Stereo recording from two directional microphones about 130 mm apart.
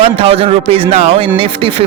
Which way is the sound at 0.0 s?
50° right (ahead or behind).